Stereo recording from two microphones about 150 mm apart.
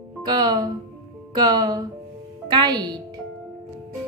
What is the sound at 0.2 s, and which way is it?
Speech, 25° right (ahead or behind).